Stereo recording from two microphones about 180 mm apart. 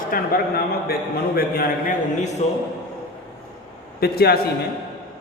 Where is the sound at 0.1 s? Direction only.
55° left (ahead or behind).